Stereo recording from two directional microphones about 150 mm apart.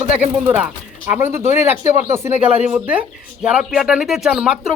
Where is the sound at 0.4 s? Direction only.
10° right (ahead or behind).